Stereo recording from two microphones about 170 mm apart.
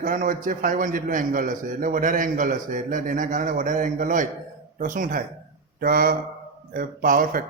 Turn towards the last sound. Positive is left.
turn(degrees=-55)  # may be behind; listen again after turning